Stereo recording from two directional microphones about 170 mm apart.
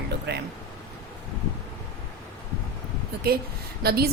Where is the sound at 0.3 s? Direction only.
80° right.